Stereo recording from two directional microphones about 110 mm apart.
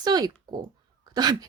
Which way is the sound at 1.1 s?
40° right (ahead or behind).